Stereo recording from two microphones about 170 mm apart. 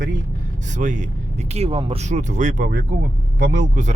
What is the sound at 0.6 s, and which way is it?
Speech, 50° right (ahead or behind).